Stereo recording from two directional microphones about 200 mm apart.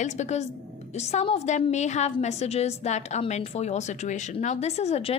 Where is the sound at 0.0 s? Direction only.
35° left (ahead or behind).